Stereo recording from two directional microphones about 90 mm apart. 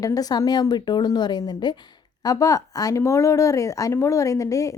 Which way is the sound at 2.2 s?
40° left (ahead or behind).